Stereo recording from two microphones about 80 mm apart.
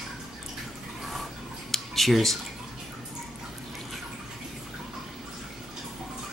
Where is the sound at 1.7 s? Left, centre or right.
Centre.